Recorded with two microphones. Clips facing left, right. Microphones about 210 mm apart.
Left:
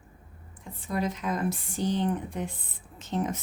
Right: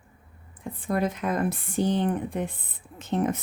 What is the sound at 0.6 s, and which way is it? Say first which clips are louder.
A woman's voice: right 4 dB; 55° right (ahead or behind).